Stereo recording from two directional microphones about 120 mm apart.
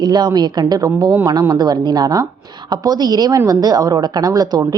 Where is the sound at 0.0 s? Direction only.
35° right (ahead or behind).